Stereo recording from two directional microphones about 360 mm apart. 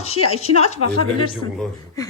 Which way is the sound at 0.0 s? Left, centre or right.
Centre.